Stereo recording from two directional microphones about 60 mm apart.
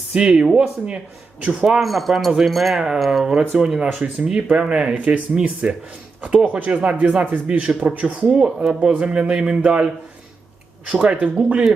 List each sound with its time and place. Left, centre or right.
0.1 s speech: centre
1.8 s speech: centre
4.0 s speech: right
8.4 s speech: centre